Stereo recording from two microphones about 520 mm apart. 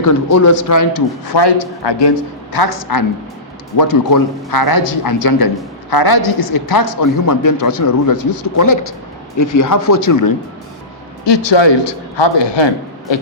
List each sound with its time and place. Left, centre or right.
0.0 s a woman's voice: left
11.4 s a man's voice: left